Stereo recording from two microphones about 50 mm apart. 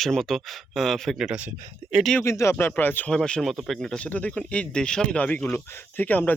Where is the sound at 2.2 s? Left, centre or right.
Left.